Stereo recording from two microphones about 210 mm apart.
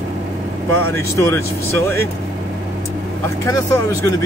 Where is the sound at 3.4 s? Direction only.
15° left (ahead or behind).